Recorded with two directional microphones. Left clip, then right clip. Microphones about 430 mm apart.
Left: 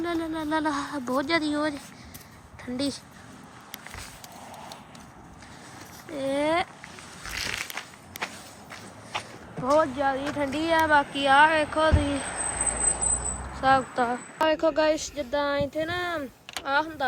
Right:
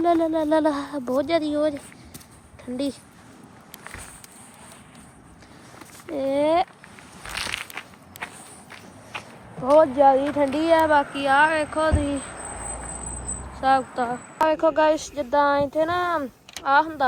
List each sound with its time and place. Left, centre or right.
0.0 s speech: centre
2.7 s speech: centre
6.1 s speech: centre
7.3 s crushing: centre
9.1 s walk: centre
9.6 s speech: centre
12.4 s a sound: left
13.6 s speech: centre